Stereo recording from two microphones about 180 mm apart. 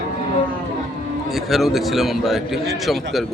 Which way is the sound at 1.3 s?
Centre (ahead or behind).